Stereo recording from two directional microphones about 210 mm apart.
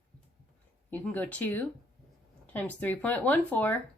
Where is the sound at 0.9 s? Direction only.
5° left (ahead or behind).